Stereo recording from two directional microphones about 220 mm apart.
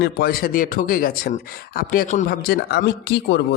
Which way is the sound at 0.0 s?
45° left (ahead or behind).